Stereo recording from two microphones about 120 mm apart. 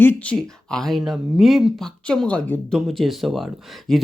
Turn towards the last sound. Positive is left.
turn(degrees=0)  # may be behind; listen again after turning